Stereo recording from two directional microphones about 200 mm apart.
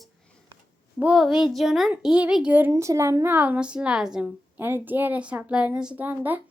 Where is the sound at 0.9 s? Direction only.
5° right (ahead or behind).